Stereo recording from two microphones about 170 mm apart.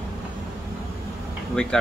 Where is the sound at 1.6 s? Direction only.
5° left (ahead or behind).